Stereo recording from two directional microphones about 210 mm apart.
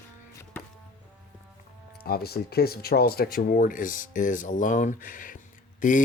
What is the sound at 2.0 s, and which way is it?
Speech, 45° left (ahead or behind).